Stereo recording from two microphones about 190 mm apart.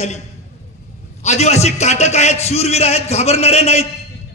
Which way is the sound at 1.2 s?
35° left (ahead or behind).